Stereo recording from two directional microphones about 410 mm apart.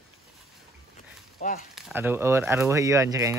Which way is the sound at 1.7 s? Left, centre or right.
Centre.